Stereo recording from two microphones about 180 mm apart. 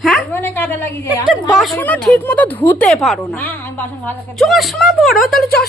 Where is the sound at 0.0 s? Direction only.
10° left (ahead or behind).